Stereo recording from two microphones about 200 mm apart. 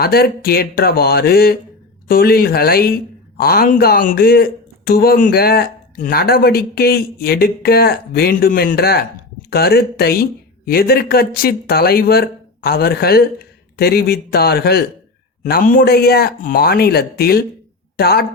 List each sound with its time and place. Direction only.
0.0 s a woman's voice: 50° left (ahead or behind)